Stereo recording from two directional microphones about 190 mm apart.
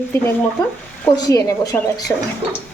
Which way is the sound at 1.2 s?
20° left (ahead or behind).